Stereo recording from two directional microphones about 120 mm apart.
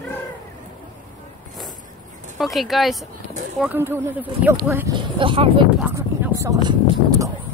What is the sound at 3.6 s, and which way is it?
Speech, 20° right (ahead or behind).